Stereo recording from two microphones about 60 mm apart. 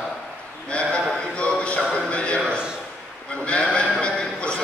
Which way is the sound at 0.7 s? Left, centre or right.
Centre.